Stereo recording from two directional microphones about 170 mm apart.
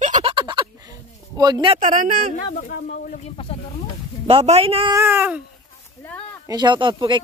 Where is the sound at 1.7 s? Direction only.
45° right (ahead or behind).